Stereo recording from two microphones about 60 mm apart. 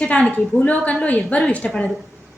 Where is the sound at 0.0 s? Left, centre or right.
Left.